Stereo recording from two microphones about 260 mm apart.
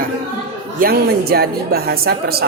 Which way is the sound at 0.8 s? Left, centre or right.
Right.